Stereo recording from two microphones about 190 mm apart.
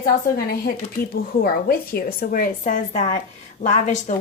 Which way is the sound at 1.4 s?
50° left (ahead or behind).